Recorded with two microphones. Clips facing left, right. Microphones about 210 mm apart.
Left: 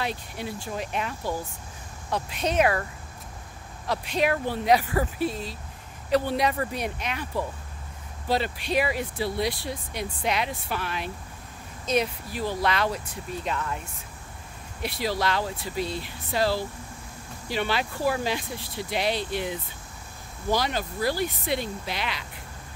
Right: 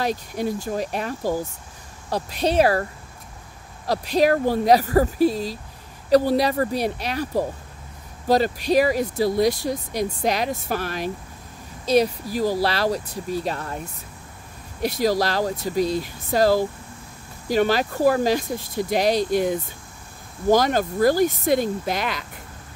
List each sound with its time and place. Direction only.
0.0 s speech: 40° right (ahead or behind)